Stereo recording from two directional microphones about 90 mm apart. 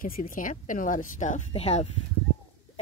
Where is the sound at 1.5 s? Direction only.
90° left.